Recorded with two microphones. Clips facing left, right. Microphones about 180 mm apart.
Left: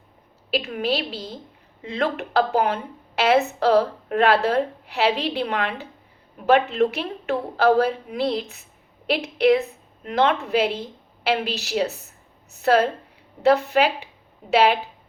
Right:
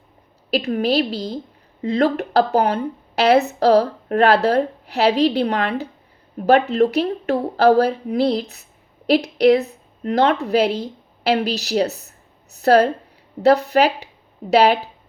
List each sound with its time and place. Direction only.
0.5 s a woman's voice: 40° right (ahead or behind)